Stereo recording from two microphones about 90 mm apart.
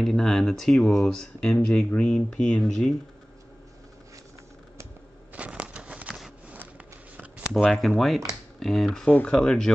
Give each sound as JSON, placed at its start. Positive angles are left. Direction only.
{"t": 0.0, "sound": "speech", "side_deg": 5}
{"t": 5.3, "sound": "a sound", "side_deg": -15}
{"t": 7.5, "sound": "speech", "side_deg": 0}